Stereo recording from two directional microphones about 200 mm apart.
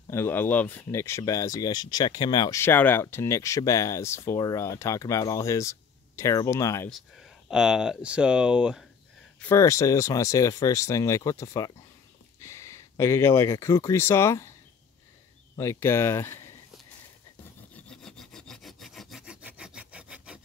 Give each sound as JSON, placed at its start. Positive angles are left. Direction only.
{"t": 0.1, "sound": "speech", "side_deg": 10}
{"t": 6.9, "sound": "speech", "side_deg": 0}
{"t": 9.4, "sound": "speech", "side_deg": 15}
{"t": 15.5, "sound": "speech", "side_deg": 15}
{"t": 17.7, "sound": "sawing", "side_deg": 5}